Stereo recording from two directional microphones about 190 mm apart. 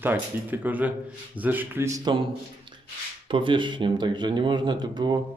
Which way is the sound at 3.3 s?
25° right (ahead or behind).